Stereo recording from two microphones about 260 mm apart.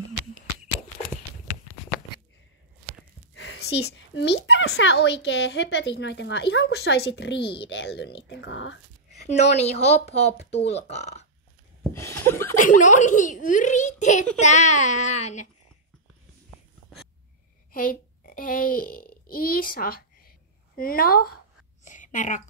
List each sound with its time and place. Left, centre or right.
3.3 s a woman's voice: left
9.2 s a child's voice: left
11.9 s a sound: centre
12.5 s a child's voice: left
17.7 s a child's voice: left
21.8 s a sound: left